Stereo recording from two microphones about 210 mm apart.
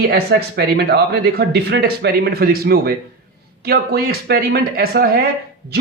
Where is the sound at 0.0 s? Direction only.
50° right (ahead or behind).